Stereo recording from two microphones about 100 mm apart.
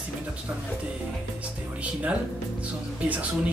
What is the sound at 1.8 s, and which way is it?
Speech, 15° right (ahead or behind).